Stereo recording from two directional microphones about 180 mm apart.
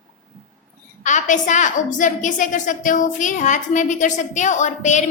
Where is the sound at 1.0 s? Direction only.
45° left (ahead or behind).